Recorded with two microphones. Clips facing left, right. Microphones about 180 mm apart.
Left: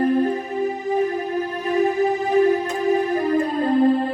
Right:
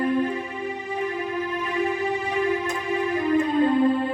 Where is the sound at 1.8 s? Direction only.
40° left (ahead or behind).